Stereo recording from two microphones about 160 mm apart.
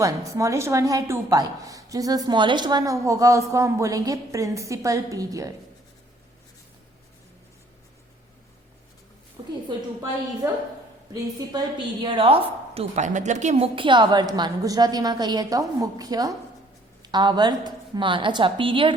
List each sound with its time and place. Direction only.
0.0 s a woman's voice: 20° right (ahead or behind)
9.6 s a woman's voice: 20° right (ahead or behind)
12.0 s a woman's voice: 35° right (ahead or behind)